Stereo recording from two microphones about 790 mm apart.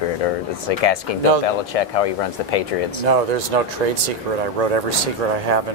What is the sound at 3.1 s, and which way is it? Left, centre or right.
Speech, right.